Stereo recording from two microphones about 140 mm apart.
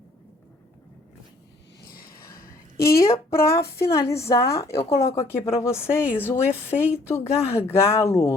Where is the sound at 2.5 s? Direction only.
20° left (ahead or behind).